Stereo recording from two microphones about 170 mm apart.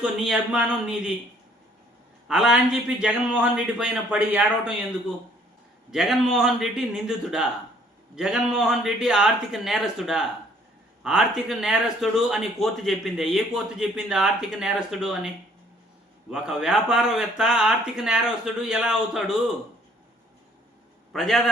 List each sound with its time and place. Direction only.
0.0 s a man's voice: 5° right (ahead or behind)
2.2 s a man's voice: 5° right (ahead or behind)
5.9 s a man's voice: centre (ahead or behind)
16.3 s a man's voice: 5° right (ahead or behind)
21.1 s a man's voice: centre (ahead or behind)